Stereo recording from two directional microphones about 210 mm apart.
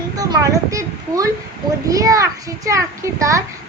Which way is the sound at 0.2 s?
15° right (ahead or behind).